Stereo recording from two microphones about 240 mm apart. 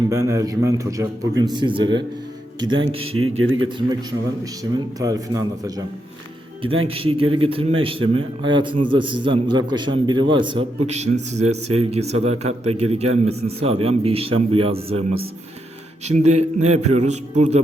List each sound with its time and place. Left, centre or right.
0.1 s a man's voice: centre
3.1 s speech: right
3.7 s a man's voice: centre
6.8 s a man's voice: right
16.0 s a man's voice: right